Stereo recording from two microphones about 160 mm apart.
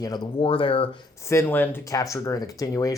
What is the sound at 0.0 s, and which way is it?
Speech, 30° left (ahead or behind).